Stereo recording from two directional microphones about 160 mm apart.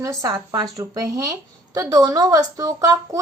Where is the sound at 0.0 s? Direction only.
20° right (ahead or behind).